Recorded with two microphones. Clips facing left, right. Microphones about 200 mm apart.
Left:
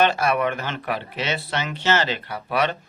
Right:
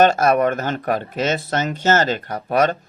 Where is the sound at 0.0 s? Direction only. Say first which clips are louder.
Right 5 dB; 45° right (ahead or behind).